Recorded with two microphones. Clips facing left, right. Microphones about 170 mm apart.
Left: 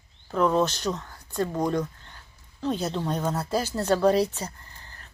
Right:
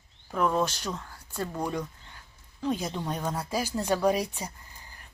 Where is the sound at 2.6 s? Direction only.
10° right (ahead or behind).